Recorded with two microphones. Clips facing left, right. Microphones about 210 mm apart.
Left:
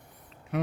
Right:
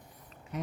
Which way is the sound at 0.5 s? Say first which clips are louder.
Left 7 dB; 65° left (ahead or behind).